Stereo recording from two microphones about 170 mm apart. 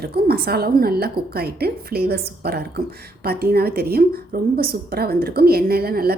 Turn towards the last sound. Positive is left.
turn(degrees=-65)  # may be behind; listen again after turning